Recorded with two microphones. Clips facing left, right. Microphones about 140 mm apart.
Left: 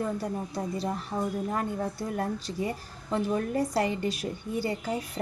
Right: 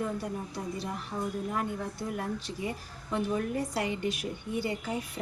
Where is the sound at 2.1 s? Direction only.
35° left (ahead or behind).